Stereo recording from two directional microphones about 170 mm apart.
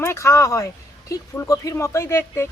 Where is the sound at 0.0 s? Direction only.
15° left (ahead or behind).